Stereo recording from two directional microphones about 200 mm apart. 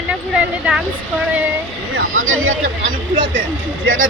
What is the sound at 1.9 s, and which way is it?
Speech, 85° right.